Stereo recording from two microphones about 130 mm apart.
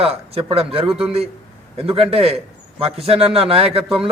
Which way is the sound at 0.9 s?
5° right (ahead or behind).